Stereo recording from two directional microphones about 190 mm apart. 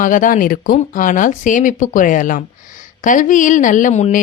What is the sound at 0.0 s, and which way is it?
Speech, 45° left (ahead or behind).